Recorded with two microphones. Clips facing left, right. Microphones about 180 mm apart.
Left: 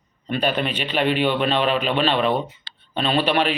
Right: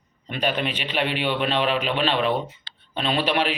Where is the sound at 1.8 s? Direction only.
10° right (ahead or behind).